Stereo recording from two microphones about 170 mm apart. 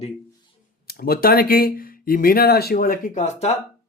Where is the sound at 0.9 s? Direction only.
65° left (ahead or behind); by 3.5 s 40° left (ahead or behind).